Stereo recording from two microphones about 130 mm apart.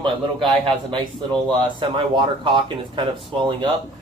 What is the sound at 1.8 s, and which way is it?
Speech, 40° right (ahead or behind).